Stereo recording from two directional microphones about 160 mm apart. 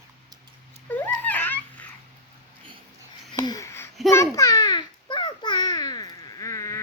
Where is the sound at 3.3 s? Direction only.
25° left (ahead or behind).